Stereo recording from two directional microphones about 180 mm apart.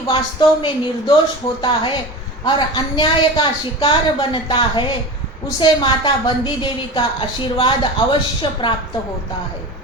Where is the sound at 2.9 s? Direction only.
25° left (ahead or behind).